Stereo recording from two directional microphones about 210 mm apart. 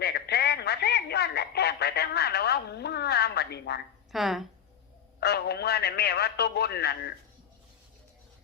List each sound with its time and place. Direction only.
0.0 s a sound: 50° left (ahead or behind)
4.1 s speech: centre (ahead or behind)
5.2 s a man's voice: 50° left (ahead or behind)